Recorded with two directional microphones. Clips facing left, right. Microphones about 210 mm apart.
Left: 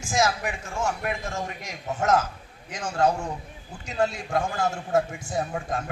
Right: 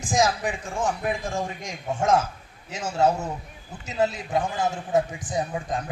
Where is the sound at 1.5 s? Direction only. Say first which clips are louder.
Right 2 dB; 30° right (ahead or behind).